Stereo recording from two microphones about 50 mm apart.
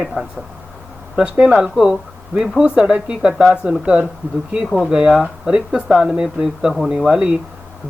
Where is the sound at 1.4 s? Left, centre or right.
Centre.